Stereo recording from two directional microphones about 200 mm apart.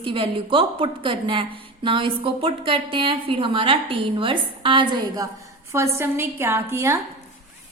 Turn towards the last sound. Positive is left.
turn(degrees=-15)  # may be behind; listen again after turning